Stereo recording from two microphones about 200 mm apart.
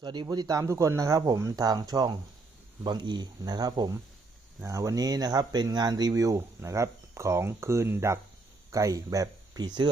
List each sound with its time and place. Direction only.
0.0 s speech: 20° right (ahead or behind)